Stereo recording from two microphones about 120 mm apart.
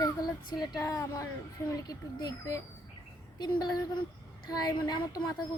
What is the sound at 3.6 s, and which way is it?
A child's voice, 35° left (ahead or behind).